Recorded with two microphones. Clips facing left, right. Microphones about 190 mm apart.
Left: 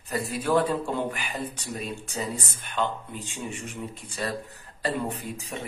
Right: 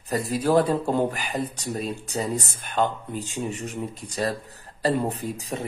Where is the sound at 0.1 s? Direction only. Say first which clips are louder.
Right 4 dB; 40° right (ahead or behind).